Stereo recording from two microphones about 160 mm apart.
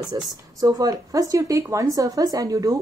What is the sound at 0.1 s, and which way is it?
Speech, 20° right (ahead or behind).